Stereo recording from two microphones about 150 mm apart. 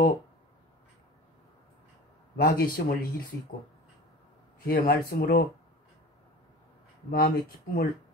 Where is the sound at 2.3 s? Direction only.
75° left (ahead or behind).